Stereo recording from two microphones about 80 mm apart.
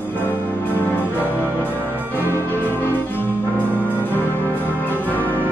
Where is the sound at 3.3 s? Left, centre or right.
Left.